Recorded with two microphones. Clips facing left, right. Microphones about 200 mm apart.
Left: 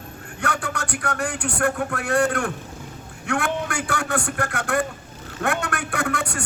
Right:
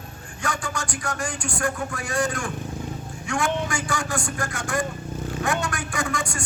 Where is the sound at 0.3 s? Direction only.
60° left (ahead or behind).